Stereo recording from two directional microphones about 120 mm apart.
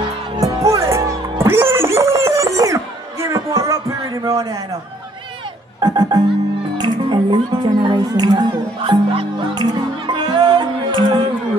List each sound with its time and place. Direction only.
0.4 s music: 25° right (ahead or behind)
5.8 s music: 35° right (ahead or behind)